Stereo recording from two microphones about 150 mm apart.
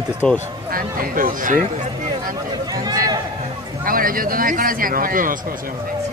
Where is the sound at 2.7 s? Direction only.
25° right (ahead or behind).